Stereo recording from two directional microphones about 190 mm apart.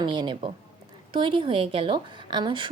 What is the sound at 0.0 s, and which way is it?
A woman's voice, 25° right (ahead or behind).